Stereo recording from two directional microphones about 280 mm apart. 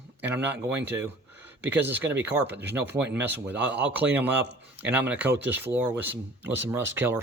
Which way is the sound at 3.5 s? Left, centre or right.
Centre.